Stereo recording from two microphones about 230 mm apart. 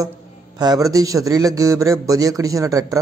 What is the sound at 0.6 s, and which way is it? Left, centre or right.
A man's voice, centre.